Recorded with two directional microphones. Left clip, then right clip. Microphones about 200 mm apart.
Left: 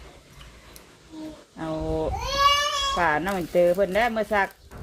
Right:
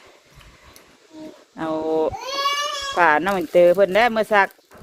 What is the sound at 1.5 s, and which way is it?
Speech, 50° right (ahead or behind).